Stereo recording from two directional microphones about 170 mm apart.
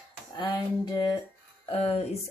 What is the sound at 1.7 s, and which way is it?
Speech, 35° left (ahead or behind).